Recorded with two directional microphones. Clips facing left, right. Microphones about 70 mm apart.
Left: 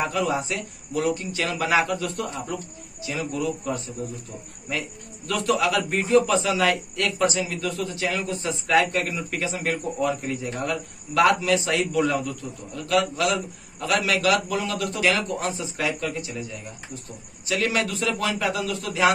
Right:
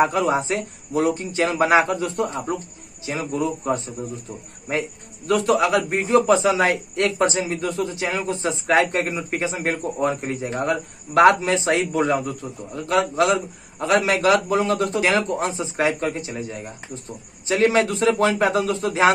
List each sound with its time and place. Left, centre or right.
0.0 s a man's voice: right
2.3 s a man's voice: right